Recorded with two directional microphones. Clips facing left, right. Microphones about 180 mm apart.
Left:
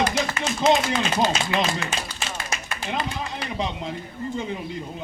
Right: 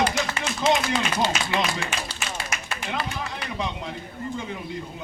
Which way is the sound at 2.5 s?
30° left (ahead or behind).